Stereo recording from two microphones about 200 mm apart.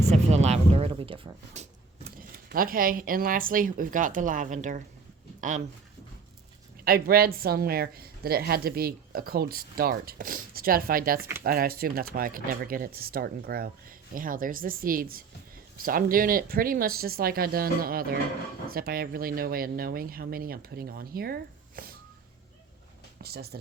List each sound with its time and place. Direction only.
0.4 s speech: 30° right (ahead or behind)
2.5 s speech: 45° right (ahead or behind)
6.8 s speech: 50° right (ahead or behind)
23.2 s speech: 50° right (ahead or behind)